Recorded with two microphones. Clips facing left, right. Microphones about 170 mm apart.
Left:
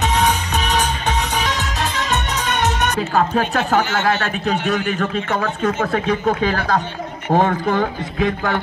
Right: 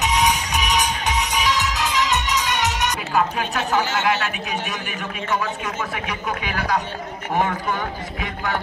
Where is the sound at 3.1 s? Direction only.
35° left (ahead or behind).